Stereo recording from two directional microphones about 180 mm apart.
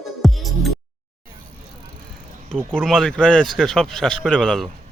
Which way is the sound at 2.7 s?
5° left (ahead or behind).